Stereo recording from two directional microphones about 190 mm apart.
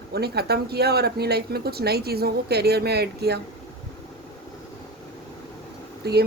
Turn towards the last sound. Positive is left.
turn(degrees=-60)  # may be behind; listen again after turning